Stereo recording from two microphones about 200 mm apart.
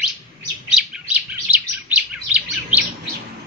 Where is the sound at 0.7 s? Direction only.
5° right (ahead or behind).